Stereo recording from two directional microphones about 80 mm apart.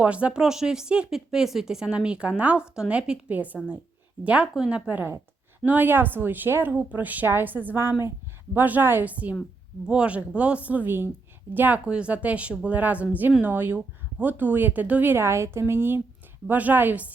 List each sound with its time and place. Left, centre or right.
0.0 s speech: centre
4.5 s a woman's voice: centre
4.9 s a woman's voice: right